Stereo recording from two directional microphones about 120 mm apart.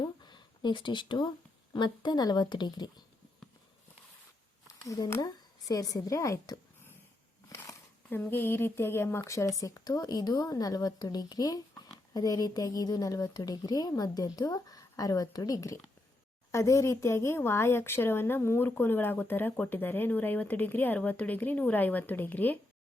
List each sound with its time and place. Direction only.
0.0 s a sound: 40° left (ahead or behind)
1.7 s speech: 40° left (ahead or behind)
4.8 s speech: 30° left (ahead or behind)
7.5 s speech: 20° left (ahead or behind)